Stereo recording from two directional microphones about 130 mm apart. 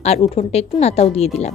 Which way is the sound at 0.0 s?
55° left (ahead or behind).